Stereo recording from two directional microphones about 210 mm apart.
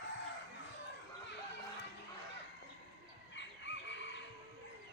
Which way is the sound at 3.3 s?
60° left (ahead or behind).